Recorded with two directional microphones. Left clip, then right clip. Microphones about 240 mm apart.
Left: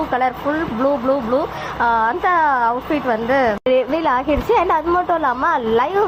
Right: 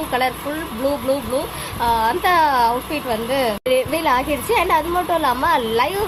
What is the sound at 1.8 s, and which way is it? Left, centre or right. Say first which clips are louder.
A woman's voice: left 1 dB; centre.